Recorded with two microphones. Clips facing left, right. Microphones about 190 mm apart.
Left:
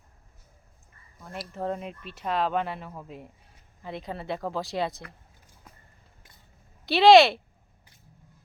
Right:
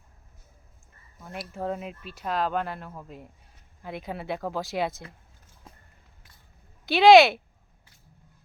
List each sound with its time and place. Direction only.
1.2 s speech: centre (ahead or behind)
5.7 s a sound: 25° right (ahead or behind)
6.8 s speech: centre (ahead or behind)